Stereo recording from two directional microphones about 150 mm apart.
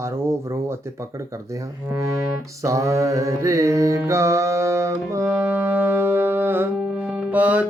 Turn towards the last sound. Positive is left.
turn(degrees=-10)  # may be behind; listen again after turning